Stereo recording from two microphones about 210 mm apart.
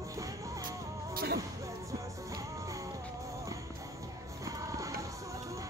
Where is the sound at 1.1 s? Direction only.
50° right (ahead or behind).